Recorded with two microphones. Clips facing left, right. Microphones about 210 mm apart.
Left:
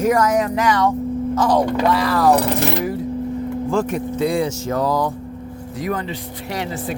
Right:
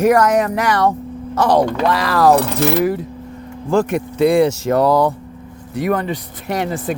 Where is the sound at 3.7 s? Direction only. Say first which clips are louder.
Right 6 dB; 70° right (ahead or behind).